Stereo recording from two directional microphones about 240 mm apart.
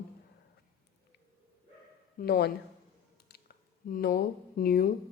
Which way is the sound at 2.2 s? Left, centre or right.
Left.